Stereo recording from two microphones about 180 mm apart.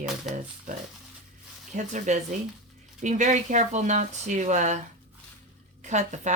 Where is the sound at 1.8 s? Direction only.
40° right (ahead or behind).